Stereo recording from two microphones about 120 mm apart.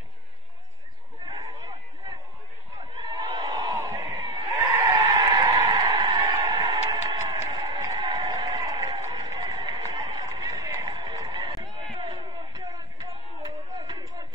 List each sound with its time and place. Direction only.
1.2 s chatter: 35° right (ahead or behind)
3.0 s a sound: 35° right (ahead or behind)
10.2 s run: 30° right (ahead or behind)